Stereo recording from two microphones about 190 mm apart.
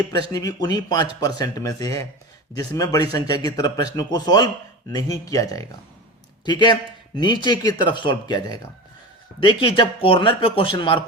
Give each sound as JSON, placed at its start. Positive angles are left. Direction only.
{"t": 0.1, "sound": "a man's voice", "side_deg": 20}